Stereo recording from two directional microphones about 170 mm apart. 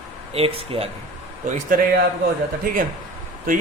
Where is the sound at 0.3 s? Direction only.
35° right (ahead or behind).